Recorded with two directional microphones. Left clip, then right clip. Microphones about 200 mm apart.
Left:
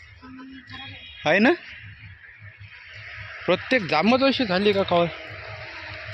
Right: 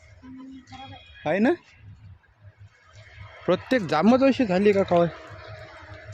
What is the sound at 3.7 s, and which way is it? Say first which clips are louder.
A man's voice: even; 25° right (ahead or behind).